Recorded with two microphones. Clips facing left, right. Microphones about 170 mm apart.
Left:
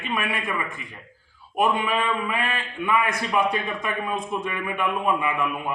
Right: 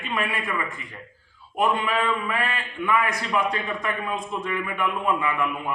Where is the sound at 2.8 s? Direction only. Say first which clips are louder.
Even; 20° left (ahead or behind).